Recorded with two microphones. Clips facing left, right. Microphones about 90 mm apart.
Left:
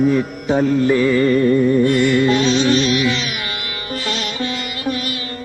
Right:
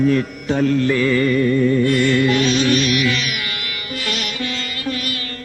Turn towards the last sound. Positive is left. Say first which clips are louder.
# left 2 dB
turn(degrees=25)  # may be behind; listen again after turning